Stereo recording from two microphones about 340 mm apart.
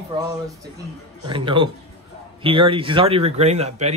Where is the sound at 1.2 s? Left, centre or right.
Centre.